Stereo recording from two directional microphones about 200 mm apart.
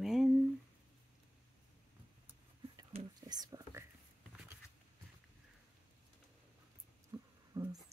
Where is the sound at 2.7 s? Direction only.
20° right (ahead or behind).